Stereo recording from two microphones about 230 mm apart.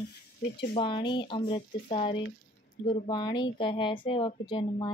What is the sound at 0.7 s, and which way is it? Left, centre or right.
A woman's voice, left.